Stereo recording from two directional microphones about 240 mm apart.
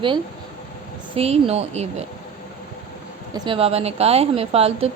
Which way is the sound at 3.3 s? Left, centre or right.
Right.